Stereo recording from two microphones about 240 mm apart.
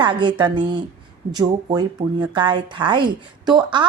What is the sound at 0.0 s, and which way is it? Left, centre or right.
Speech, centre.